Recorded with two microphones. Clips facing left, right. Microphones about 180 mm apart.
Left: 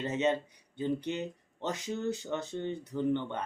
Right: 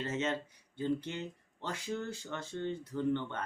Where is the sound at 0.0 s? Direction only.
15° left (ahead or behind).